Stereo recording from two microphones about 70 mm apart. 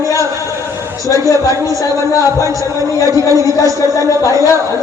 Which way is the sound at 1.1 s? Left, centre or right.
Right.